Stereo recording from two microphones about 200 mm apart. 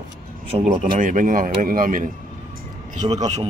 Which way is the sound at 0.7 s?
40° right (ahead or behind).